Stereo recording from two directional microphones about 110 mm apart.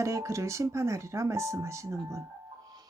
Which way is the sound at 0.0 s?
30° right (ahead or behind).